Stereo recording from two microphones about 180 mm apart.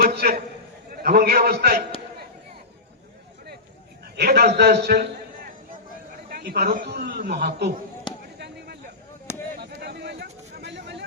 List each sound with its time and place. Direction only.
0.0 s a sound: 60° right (ahead or behind)
1.0 s a man's voice: 60° right (ahead or behind)
4.2 s a man's voice: 60° right (ahead or behind)
6.2 s a man's voice: 60° right (ahead or behind)
8.4 s basketball bounce: 65° right (ahead or behind)
9.6 s a sound: 65° right (ahead or behind)